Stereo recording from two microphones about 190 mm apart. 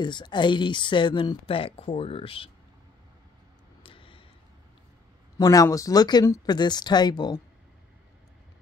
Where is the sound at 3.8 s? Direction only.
30° left (ahead or behind).